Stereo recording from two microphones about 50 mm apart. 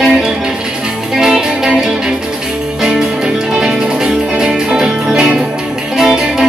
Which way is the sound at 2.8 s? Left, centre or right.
Centre.